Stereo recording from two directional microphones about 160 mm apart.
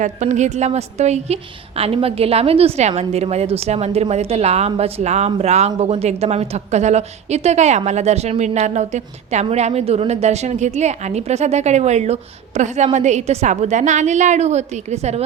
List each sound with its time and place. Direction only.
0.0 s a woman's voice: 50° right (ahead or behind)